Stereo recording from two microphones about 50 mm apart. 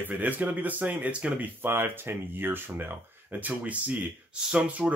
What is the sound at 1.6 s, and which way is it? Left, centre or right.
Speech, right.